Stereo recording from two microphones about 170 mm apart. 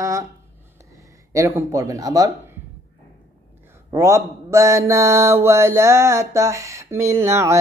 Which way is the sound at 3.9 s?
15° right (ahead or behind).